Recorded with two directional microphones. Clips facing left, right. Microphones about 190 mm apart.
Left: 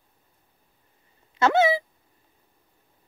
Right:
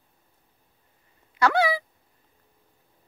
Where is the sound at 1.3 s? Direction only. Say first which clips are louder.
Left 2 dB; 25° left (ahead or behind).